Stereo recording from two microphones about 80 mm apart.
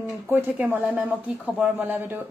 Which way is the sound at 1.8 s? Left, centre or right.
Right.